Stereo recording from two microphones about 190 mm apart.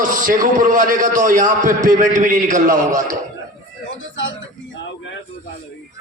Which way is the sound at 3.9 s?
75° left (ahead or behind).